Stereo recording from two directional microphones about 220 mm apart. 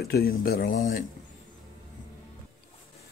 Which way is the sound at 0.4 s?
40° left (ahead or behind).